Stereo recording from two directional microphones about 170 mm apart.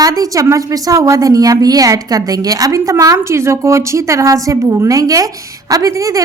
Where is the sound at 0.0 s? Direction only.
20° right (ahead or behind).